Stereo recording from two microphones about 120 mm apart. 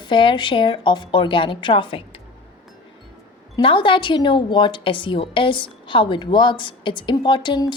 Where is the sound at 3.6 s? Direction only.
45° left (ahead or behind).